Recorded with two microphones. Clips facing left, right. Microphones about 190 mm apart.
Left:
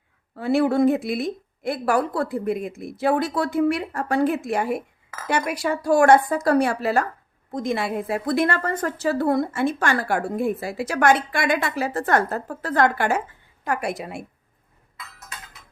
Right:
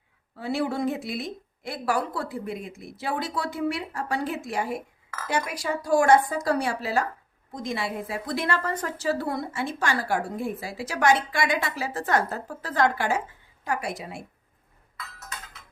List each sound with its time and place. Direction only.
0.3 s a woman's voice: 55° left (ahead or behind)